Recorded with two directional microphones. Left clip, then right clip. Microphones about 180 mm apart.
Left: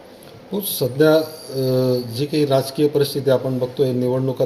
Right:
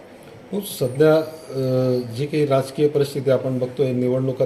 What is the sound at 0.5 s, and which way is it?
Speech, 35° left (ahead or behind).